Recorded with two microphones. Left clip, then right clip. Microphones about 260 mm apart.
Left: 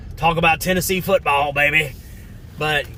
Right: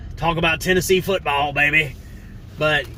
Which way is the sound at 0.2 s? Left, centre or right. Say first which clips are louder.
Left 3 dB; centre.